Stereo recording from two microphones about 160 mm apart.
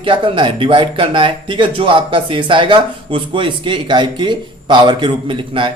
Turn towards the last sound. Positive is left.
turn(degrees=-30)  # may be behind; listen again after turning